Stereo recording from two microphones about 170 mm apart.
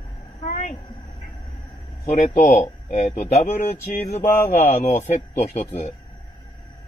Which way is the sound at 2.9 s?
45° left (ahead or behind).